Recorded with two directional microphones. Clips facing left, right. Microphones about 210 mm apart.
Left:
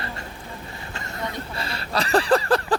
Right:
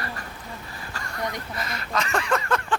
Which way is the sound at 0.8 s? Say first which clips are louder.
Right 1 dB; 25° left (ahead or behind).